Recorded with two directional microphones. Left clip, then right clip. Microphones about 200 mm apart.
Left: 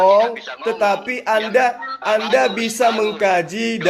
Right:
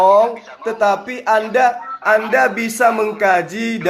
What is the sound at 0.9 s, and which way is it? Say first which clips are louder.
Music: right 2 dB; 25° left (ahead or behind).